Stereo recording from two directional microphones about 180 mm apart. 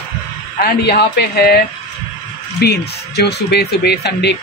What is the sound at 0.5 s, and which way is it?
Speech, 60° left (ahead or behind).